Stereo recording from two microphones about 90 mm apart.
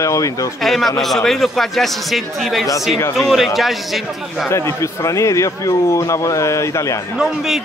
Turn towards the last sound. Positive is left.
turn(degrees=-5)  # may be behind; listen again after turning